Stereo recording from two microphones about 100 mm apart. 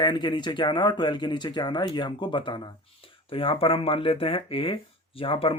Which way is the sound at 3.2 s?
65° left (ahead or behind).